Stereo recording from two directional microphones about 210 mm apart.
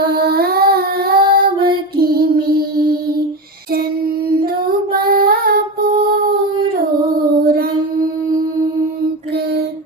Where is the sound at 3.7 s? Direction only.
45° right (ahead or behind).